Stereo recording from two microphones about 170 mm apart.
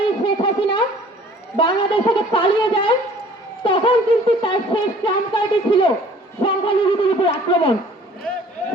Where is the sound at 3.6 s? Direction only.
30° left (ahead or behind).